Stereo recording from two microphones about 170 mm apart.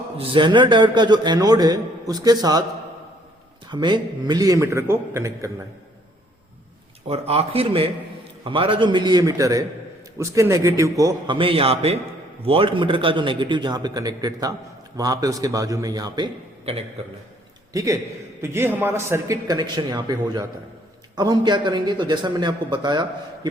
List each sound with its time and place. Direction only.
0.2 s a man's voice: 30° right (ahead or behind)
3.7 s a man's voice: 25° right (ahead or behind)
7.1 s a man's voice: 35° right (ahead or behind)
18.4 s a man's voice: 15° right (ahead or behind)